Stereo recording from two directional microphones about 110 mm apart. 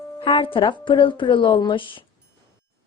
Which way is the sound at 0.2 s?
50° left (ahead or behind).